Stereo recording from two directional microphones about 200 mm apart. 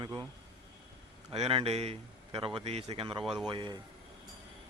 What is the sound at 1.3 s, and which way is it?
Speech, 30° right (ahead or behind).